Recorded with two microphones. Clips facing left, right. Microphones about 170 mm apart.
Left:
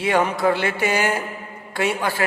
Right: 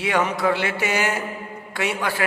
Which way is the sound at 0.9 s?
30° left (ahead or behind).